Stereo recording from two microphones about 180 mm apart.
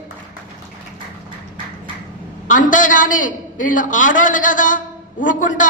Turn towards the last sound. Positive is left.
turn(degrees=45)  # may be behind; listen again after turning